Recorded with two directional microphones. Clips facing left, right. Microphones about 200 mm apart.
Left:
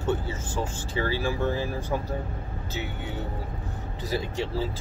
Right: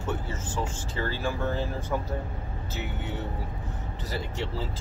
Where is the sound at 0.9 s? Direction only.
10° left (ahead or behind).